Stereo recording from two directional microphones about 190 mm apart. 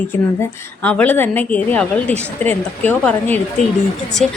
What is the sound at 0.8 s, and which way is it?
A woman's voice, 10° left (ahead or behind).